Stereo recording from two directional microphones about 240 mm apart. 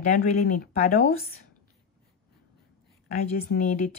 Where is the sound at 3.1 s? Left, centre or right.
Left.